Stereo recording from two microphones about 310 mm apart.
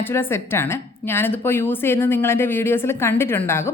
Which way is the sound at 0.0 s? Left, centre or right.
Centre.